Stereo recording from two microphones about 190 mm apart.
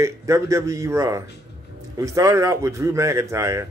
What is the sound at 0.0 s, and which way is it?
Speech, 15° right (ahead or behind).